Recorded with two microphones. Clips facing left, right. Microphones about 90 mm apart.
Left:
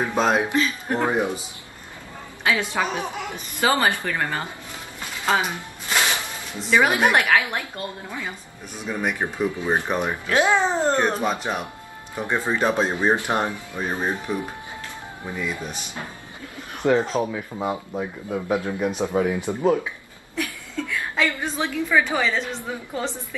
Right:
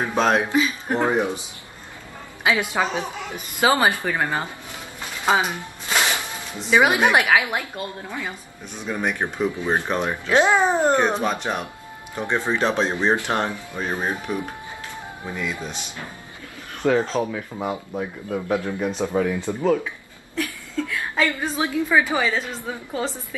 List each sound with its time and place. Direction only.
0.1 s speech: 5° left (ahead or behind)
0.5 s a woman's voice: 15° right (ahead or behind)
2.4 s a woman's voice: 15° right (ahead or behind)
6.7 s a woman's voice: 10° right (ahead or behind)
8.9 s speech: 5° left (ahead or behind)
10.5 s a woman's voice: 15° right (ahead or behind); by 13.5 s 15° left (ahead or behind)
13.9 s a woman's voice: 10° right (ahead or behind)
15.3 s speech: 10° left (ahead or behind)
16.8 s speech: 15° left (ahead or behind)
20.3 s a woman's voice: 5° right (ahead or behind)
21.6 s a woman's voice: 15° right (ahead or behind)